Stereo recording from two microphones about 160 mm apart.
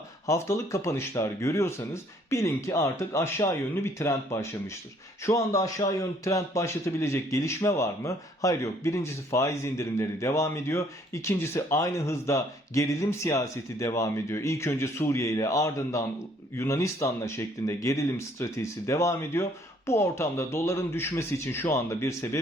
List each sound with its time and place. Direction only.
0.3 s a man's voice: 15° left (ahead or behind)